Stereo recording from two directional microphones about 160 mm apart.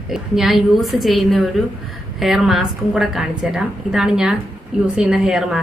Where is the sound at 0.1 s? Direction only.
Centre (ahead or behind).